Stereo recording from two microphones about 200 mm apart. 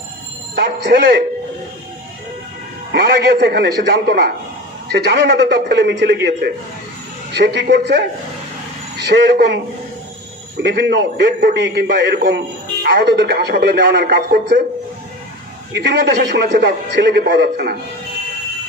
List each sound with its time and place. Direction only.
0.6 s a man's voice: 55° right (ahead or behind)
2.9 s a man's voice: 55° right (ahead or behind)
5.7 s a man's voice: 60° right (ahead or behind)
10.6 s a man's voice: 60° right (ahead or behind)
15.7 s a man's voice: 60° right (ahead or behind)